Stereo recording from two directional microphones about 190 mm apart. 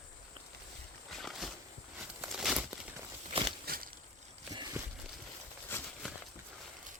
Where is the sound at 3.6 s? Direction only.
50° right (ahead or behind).